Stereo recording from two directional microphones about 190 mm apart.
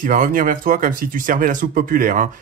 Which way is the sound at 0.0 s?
45° right (ahead or behind).